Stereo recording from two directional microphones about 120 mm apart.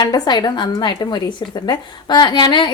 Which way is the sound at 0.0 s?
35° left (ahead or behind).